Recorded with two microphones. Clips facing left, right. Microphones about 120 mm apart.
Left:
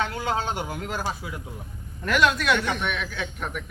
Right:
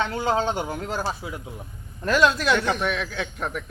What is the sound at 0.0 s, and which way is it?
A man's voice, 35° right (ahead or behind).